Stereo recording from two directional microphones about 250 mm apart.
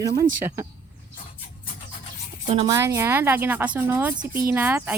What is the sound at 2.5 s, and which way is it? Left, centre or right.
Speech, right.